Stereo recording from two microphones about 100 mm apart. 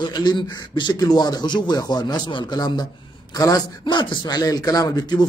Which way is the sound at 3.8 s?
50° left (ahead or behind).